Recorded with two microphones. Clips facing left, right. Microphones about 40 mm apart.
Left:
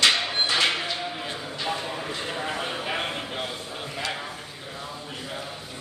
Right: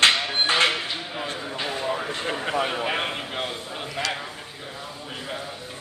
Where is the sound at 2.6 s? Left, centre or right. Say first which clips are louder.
Right 3 dB; centre.